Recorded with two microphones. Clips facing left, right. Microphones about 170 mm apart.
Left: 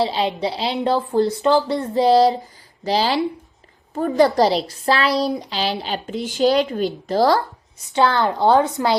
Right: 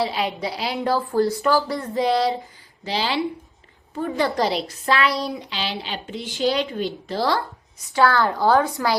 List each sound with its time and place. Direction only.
0.0 s a woman's voice: 30° left (ahead or behind)
7.9 s a woman's voice: 20° left (ahead or behind)